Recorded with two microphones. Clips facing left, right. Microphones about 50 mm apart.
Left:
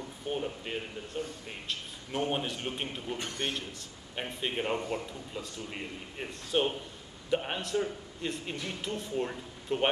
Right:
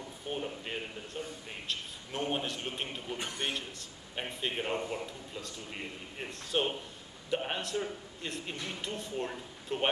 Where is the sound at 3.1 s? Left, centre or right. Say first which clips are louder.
Even; centre.